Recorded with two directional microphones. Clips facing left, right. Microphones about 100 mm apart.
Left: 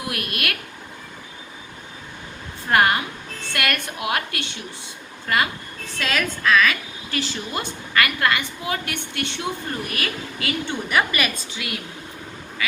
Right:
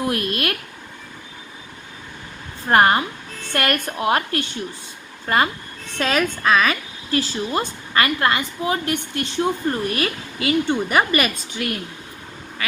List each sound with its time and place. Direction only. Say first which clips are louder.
0.0 s speech: right 6 dB; 30° right (ahead or behind)
2.6 s a woman's voice: right 3 dB; 35° right (ahead or behind)
5.3 s a woman's voice: right 3 dB; 30° right (ahead or behind)